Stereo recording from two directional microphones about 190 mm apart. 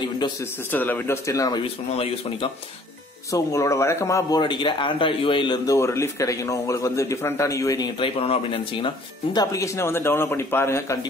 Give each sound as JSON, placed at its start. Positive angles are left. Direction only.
{"t": 0.7, "sound": "a man's voice", "side_deg": 10}
{"t": 2.0, "sound": "speech", "side_deg": 30}
{"t": 3.3, "sound": "a man's voice", "side_deg": 15}